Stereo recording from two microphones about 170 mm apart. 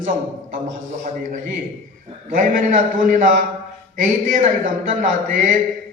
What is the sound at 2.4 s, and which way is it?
A man's voice, 50° right (ahead or behind).